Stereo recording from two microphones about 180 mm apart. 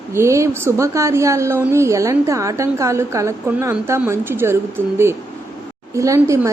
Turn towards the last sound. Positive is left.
turn(degrees=-15)  # may be behind; listen again after turning